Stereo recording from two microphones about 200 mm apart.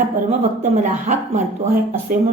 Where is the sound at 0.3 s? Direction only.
35° right (ahead or behind).